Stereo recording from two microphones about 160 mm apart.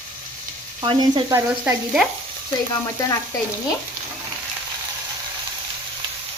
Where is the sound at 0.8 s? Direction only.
30° right (ahead or behind).